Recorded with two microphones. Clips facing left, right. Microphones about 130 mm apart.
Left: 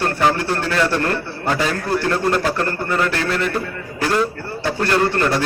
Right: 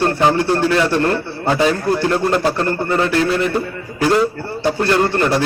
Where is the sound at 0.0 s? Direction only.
20° right (ahead or behind).